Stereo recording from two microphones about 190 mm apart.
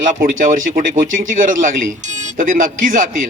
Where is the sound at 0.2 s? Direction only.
45° right (ahead or behind).